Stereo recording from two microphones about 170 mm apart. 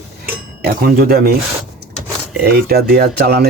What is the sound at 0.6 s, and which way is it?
Speech, 65° right (ahead or behind).